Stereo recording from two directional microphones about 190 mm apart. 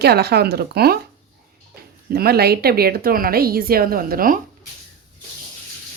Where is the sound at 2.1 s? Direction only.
55° right (ahead or behind).